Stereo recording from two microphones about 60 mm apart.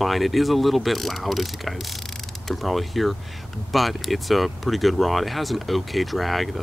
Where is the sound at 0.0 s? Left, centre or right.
Centre.